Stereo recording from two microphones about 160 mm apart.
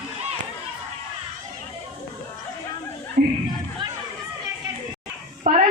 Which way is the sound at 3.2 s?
90° right.